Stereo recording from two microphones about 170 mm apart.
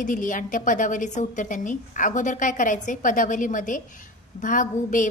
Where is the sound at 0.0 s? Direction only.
50° left (ahead or behind).